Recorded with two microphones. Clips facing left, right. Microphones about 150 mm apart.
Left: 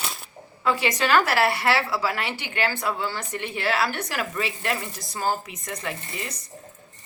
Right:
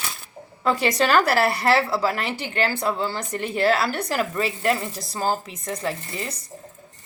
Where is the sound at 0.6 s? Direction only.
40° right (ahead or behind).